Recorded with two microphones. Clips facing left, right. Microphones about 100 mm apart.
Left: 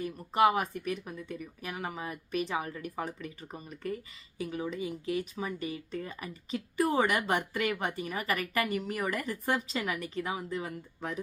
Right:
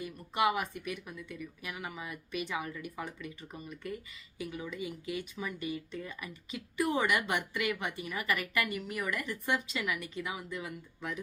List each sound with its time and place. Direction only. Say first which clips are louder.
0.0 s speech: left 5 dB; 40° left (ahead or behind)